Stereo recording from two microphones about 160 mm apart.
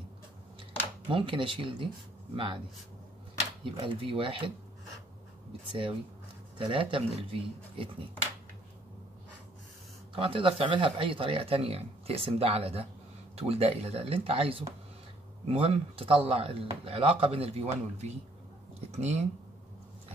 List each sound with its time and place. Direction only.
1.1 s speech: 30° right (ahead or behind)
3.8 s speech: 35° right (ahead or behind)
5.7 s speech: 35° right (ahead or behind)
10.1 s speech: 35° right (ahead or behind)